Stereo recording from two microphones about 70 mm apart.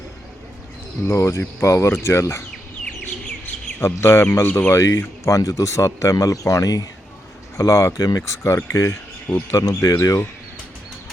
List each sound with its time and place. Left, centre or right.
1.0 s speech: left
3.8 s speech: left
7.5 s speech: left